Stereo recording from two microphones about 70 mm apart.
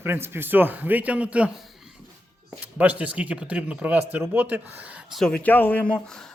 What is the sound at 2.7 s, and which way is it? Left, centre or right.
Speech, right.